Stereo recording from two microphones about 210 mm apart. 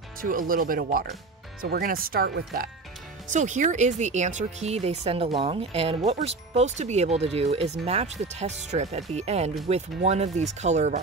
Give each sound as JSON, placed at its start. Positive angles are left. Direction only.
{"t": 0.2, "sound": "speech", "side_deg": -40}
{"t": 3.3, "sound": "speech", "side_deg": -35}